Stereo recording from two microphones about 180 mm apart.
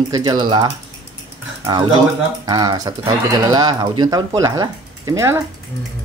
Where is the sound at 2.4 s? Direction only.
20° right (ahead or behind).